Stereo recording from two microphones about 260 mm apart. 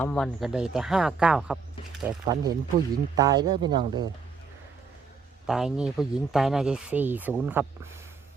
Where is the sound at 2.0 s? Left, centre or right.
Centre.